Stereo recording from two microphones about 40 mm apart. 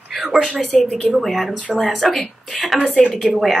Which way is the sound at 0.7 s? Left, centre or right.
Centre.